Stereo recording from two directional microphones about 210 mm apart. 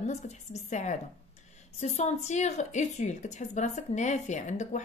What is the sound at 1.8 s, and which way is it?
Speech, 30° left (ahead or behind).